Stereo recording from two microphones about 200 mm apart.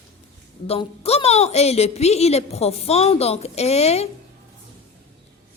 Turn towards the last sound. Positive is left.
turn(degrees=30)  # may be behind; listen again after turning